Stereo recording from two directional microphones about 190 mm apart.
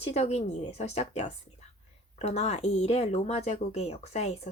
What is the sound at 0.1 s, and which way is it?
Speech, 35° left (ahead or behind).